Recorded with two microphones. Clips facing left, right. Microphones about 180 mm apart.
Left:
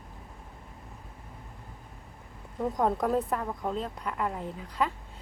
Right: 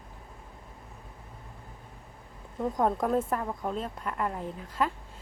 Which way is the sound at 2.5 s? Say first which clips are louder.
Even; centre (ahead or behind).